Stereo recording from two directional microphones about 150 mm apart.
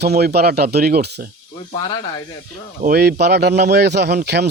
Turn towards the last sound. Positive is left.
turn(degrees=-90)